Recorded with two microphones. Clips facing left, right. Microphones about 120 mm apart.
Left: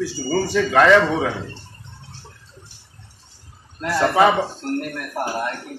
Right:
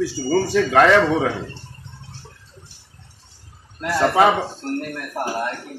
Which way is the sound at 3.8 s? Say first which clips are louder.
Even; 5° right (ahead or behind).